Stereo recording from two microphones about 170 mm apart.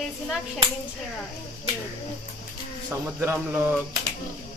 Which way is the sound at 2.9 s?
15° right (ahead or behind).